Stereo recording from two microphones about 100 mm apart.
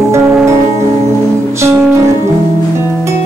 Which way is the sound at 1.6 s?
25° right (ahead or behind).